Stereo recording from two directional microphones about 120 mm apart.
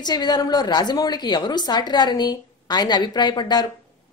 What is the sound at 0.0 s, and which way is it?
A woman's voice, 35° left (ahead or behind).